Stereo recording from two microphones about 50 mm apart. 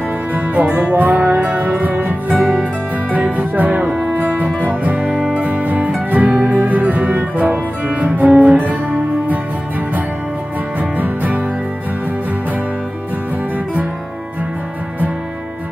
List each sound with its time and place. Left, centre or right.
0.3 s music: right
10.8 s music: right